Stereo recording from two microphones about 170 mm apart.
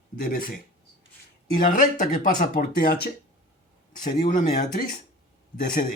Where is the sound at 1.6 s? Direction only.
55° left (ahead or behind).